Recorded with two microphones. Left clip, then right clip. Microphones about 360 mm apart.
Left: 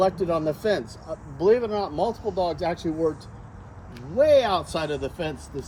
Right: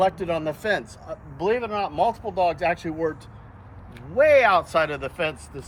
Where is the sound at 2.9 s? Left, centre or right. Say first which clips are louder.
Left 1 dB; right.